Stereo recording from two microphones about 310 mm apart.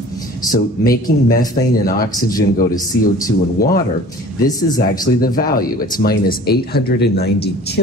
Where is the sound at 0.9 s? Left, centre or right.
Left.